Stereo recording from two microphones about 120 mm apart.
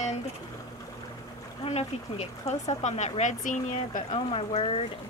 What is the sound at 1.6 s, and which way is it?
Speech, 60° left (ahead or behind).